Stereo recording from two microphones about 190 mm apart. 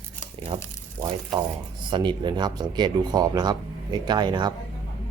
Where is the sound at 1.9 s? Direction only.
25° right (ahead or behind).